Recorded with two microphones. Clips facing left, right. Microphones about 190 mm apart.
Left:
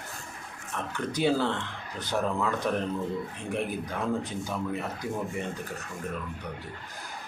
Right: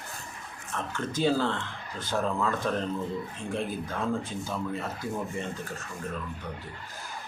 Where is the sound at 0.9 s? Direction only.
15° left (ahead or behind).